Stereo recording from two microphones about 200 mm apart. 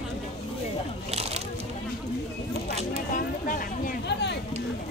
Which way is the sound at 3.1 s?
45° left (ahead or behind).